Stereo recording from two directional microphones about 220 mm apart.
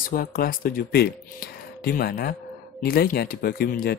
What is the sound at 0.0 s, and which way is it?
Speech, 40° left (ahead or behind).